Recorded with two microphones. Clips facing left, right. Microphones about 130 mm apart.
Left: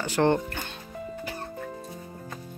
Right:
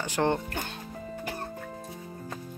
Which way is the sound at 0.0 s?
15° right (ahead or behind).